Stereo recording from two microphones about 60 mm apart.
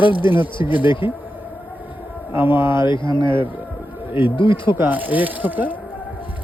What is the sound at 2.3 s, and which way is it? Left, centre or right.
Speech, right.